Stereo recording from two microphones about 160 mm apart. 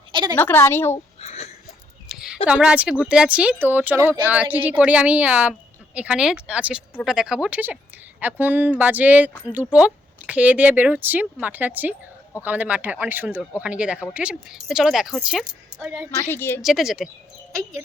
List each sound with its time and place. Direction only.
0.1 s a sound: 25° right (ahead or behind)
0.3 s a woman's voice: 15° left (ahead or behind)
1.2 s wheeze: 40° left (ahead or behind)
2.0 s a sound: 5° right (ahead or behind)
2.5 s speech: 5° right (ahead or behind)
16.1 s a woman's voice: 15° left (ahead or behind)
16.6 s speech: centre (ahead or behind)